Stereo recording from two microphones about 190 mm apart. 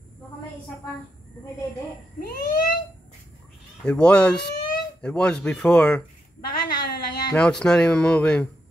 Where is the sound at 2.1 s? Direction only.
50° left (ahead or behind).